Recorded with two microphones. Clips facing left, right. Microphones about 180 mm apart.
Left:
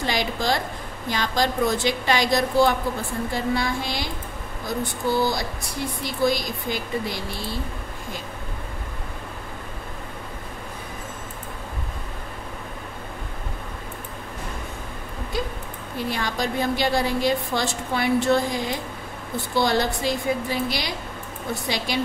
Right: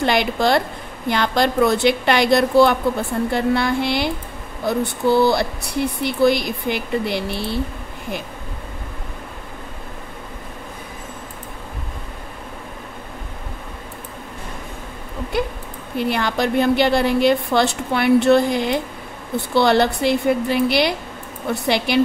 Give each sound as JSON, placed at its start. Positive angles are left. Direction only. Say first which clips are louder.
{"t": 0.0, "sound": "speech", "louder": "right 7 dB", "side_deg": -65}
{"t": 15.3, "sound": "speech", "louder": "right 6 dB", "side_deg": -65}